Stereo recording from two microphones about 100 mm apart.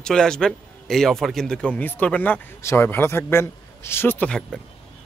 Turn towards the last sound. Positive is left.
turn(degrees=20)  # may be behind; listen again after turning